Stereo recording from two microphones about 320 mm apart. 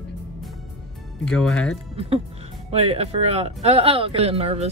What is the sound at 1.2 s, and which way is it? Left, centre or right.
Speech, centre.